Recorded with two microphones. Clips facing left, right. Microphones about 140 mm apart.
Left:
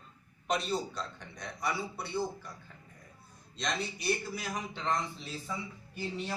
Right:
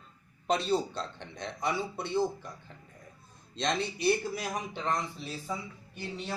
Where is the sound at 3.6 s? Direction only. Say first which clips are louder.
Right 5 dB; 30° right (ahead or behind).